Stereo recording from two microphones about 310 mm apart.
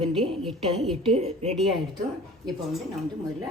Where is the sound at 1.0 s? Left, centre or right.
Centre.